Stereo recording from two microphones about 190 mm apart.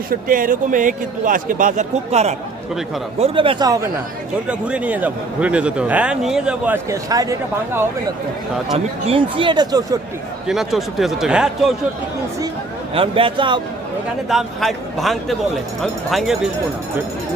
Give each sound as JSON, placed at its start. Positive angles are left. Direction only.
{"t": 0.1, "sound": "a man's voice", "side_deg": -45}
{"t": 4.5, "sound": "a man's voice", "side_deg": -5}
{"t": 8.7, "sound": "speech", "side_deg": -30}
{"t": 10.4, "sound": "speech", "side_deg": 0}
{"t": 12.9, "sound": "speech", "side_deg": -30}
{"t": 14.3, "sound": "speech", "side_deg": 0}